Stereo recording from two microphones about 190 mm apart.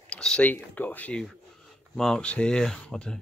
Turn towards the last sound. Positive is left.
turn(degrees=5)  # may be behind; listen again after turning